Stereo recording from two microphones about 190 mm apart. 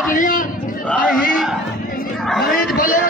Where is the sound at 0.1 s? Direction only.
45° left (ahead or behind).